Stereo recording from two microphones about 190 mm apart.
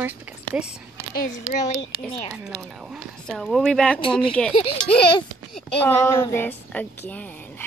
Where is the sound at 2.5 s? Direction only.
5° right (ahead or behind).